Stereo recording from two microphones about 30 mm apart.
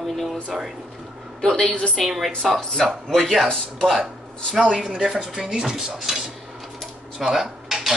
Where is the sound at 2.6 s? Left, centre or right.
Left.